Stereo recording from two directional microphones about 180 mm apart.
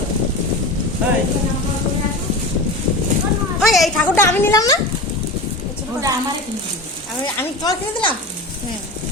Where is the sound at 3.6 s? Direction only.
Centre (ahead or behind); by 4.8 s 15° left (ahead or behind).